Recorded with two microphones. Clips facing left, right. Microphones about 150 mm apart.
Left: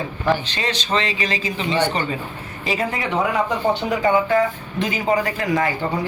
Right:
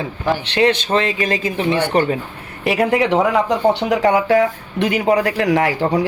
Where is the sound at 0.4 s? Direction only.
65° right (ahead or behind).